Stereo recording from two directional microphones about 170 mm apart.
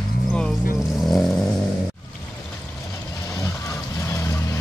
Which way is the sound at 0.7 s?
Centre (ahead or behind).